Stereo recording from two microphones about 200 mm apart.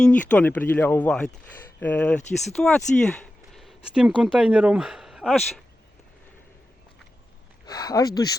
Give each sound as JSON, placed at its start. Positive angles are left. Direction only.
{"t": 0.0, "sound": "speech", "side_deg": 5}
{"t": 7.7, "sound": "speech", "side_deg": 20}